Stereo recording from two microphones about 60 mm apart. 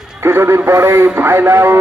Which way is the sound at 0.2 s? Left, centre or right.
Right.